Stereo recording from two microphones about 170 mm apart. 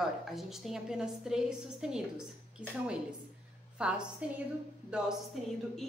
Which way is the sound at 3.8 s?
5° right (ahead or behind).